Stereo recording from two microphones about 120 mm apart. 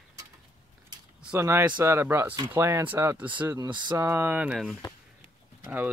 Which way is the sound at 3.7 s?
40° right (ahead or behind).